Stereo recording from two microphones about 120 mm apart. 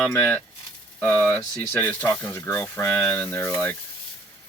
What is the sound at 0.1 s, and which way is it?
Speech, 20° left (ahead or behind).